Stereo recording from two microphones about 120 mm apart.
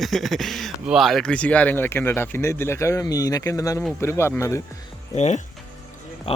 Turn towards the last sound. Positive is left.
turn(degrees=70)  # may be behind; listen again after turning